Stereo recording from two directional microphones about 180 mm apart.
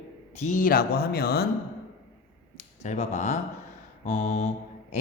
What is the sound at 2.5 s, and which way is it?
A man's voice, 40° left (ahead or behind).